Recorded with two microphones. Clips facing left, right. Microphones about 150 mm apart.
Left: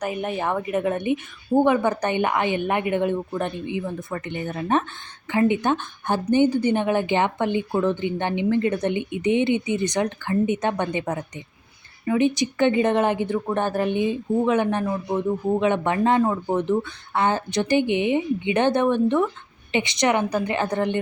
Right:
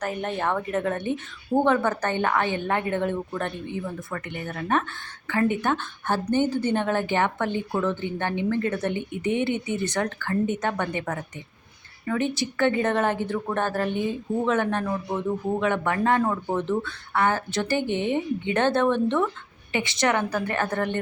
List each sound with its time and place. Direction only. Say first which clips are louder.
0.0 s a woman's voice: left 2 dB; 15° left (ahead or behind)